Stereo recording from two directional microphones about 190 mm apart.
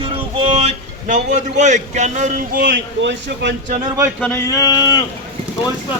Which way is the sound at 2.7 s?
65° right (ahead or behind).